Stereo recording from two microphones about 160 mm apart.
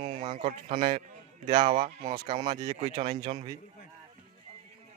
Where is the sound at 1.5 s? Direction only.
45° right (ahead or behind).